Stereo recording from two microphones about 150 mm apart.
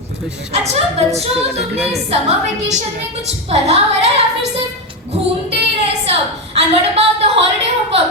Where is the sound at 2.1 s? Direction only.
45° right (ahead or behind).